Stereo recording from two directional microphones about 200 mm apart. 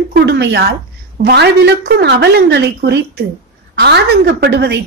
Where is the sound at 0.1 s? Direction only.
55° right (ahead or behind).